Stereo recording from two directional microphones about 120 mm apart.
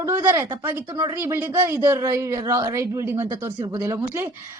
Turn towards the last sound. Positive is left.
turn(degrees=-20)  # may be behind; listen again after turning